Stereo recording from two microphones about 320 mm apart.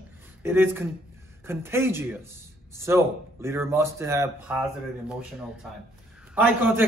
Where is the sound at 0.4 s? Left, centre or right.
Centre.